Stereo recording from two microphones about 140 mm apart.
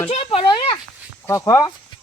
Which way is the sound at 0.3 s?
35° left (ahead or behind).